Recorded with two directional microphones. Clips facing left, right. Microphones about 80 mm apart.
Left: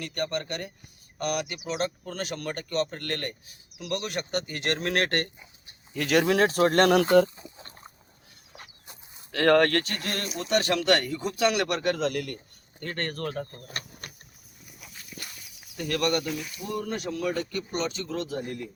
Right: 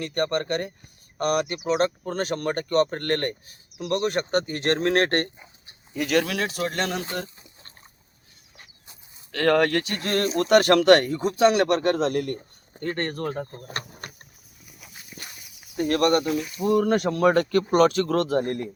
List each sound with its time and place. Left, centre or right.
0.0 s speech: right
6.2 s speech: left
6.9 s speech: left
9.3 s speech: centre
9.8 s speech: centre
10.1 s speech: right
13.7 s speech: right
15.7 s speech: right
16.7 s speech: right